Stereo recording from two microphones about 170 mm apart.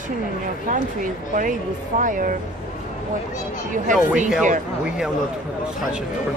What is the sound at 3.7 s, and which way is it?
Speech, 50° right (ahead or behind).